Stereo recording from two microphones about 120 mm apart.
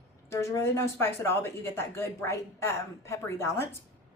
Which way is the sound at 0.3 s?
25° left (ahead or behind).